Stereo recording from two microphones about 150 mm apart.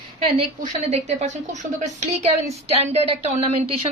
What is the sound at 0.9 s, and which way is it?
A woman's voice, 45° right (ahead or behind).